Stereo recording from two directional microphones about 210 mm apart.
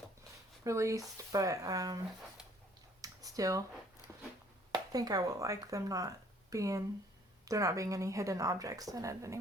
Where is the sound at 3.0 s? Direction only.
15° right (ahead or behind).